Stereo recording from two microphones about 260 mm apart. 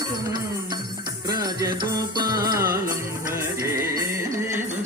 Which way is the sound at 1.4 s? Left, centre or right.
Centre.